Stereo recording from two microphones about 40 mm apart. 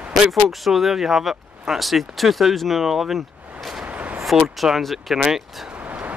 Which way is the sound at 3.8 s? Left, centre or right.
Right.